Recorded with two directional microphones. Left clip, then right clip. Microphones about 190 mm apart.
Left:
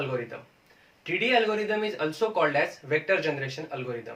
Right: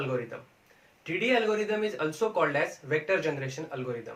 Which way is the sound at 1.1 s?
20° left (ahead or behind).